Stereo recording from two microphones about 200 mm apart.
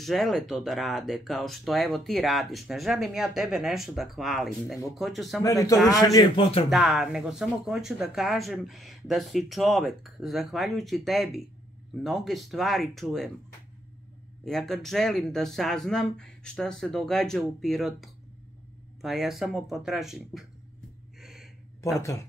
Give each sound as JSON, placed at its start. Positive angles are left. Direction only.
{"t": 0.0, "sound": "speech", "side_deg": 0}
{"t": 5.4, "sound": "a man's voice", "side_deg": 15}
{"t": 6.7, "sound": "speech", "side_deg": 0}
{"t": 14.4, "sound": "speech", "side_deg": 0}
{"t": 21.2, "sound": "gasp", "side_deg": 0}